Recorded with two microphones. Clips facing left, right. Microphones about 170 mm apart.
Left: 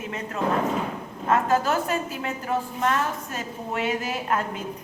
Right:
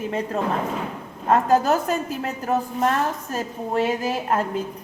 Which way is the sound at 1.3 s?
40° right (ahead or behind).